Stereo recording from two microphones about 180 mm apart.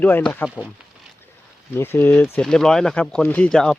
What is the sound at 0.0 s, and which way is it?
Speech, 10° left (ahead or behind).